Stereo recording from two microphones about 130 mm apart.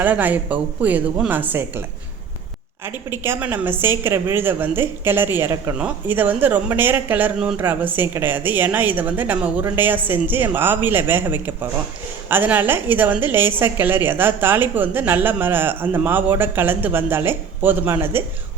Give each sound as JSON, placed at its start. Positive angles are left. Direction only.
{"t": 0.0, "sound": "a woman's voice", "side_deg": -15}
{"t": 2.8, "sound": "a woman's voice", "side_deg": -15}